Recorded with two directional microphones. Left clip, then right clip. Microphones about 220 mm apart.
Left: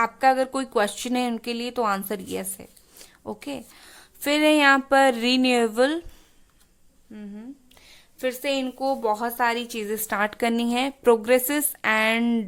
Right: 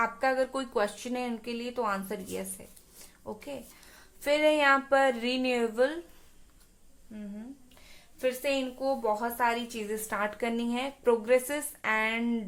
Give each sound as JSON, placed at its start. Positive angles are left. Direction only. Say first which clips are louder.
{"t": 0.0, "sound": "a woman's voice", "louder": "left 7 dB", "side_deg": 40}
{"t": 7.1, "sound": "a woman's voice", "louder": "left 4 dB", "side_deg": 45}